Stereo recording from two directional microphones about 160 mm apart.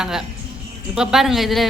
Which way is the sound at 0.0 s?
5° right (ahead or behind).